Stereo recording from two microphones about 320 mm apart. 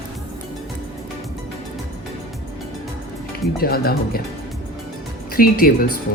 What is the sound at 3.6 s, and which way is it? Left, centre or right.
Speech, left.